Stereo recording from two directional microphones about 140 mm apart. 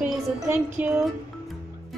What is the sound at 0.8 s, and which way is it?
Speech, 10° right (ahead or behind).